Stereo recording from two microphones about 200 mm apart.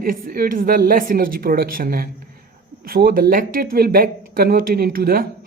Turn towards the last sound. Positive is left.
turn(degrees=-45)  # may be behind; listen again after turning